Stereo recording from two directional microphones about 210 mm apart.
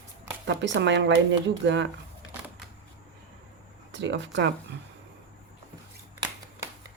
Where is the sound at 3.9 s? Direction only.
60° right (ahead or behind).